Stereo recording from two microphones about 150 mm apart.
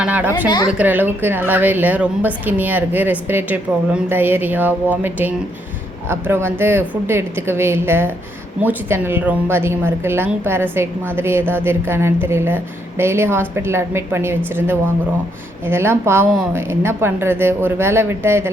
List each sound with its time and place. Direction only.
0.0 s a woman's voice: 10° right (ahead or behind)